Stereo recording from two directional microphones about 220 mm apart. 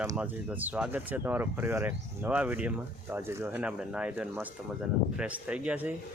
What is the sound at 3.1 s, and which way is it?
Speech, 10° right (ahead or behind).